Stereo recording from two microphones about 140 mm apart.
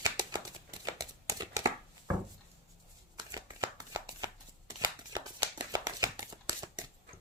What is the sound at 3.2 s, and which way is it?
Shuffling cards, 30° right (ahead or behind).